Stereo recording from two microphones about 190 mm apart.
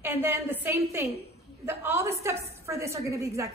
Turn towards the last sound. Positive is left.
turn(degrees=-15)  # may be behind; listen again after turning